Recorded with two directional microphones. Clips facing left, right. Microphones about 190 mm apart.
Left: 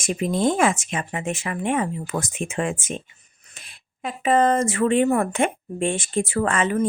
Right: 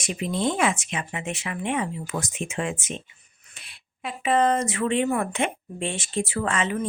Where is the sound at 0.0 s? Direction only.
45° left (ahead or behind).